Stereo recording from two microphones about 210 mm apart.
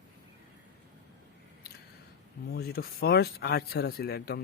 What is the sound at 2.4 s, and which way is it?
Speech, 50° left (ahead or behind).